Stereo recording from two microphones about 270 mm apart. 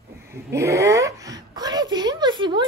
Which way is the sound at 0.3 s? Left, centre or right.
Centre.